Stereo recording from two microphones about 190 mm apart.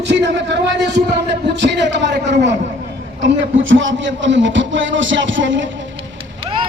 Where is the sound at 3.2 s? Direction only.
85° right.